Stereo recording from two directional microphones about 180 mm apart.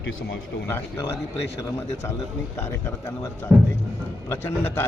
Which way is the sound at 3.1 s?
15° left (ahead or behind).